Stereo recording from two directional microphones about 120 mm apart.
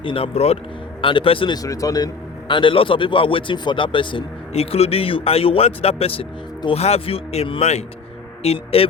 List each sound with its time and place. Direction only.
0.0 s a man's voice: 45° left (ahead or behind)
0.3 s speech: 60° left (ahead or behind)
1.0 s a man's voice: 45° left (ahead or behind)
1.5 s speech: 30° left (ahead or behind)
2.5 s a man's voice: 45° left (ahead or behind)
7.6 s speech: 65° left (ahead or behind)
8.4 s a man's voice: 55° left (ahead or behind)